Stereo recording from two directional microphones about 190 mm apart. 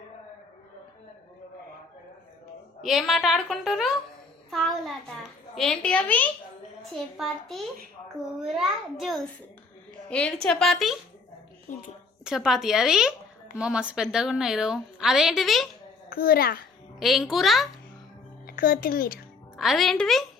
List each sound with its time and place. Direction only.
2.8 s a woman's voice: centre (ahead or behind)
5.5 s a woman's voice: 5° left (ahead or behind)
11.7 s a woman's voice: 40° left (ahead or behind)
12.2 s a woman's voice: 5° right (ahead or behind)
16.0 s a child's voice: 50° left (ahead or behind)
17.0 s a woman's voice: centre (ahead or behind)
18.4 s speech: 50° left (ahead or behind)
19.5 s a woman's voice: centre (ahead or behind)